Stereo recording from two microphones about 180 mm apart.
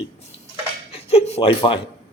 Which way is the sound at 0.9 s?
35° left (ahead or behind).